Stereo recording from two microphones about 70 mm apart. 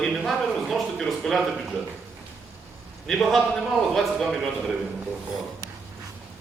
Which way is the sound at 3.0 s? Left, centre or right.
Centre.